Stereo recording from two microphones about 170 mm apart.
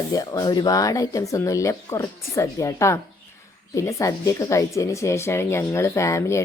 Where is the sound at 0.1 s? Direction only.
20° left (ahead or behind).